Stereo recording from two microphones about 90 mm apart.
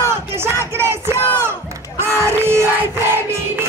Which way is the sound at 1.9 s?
30° right (ahead or behind).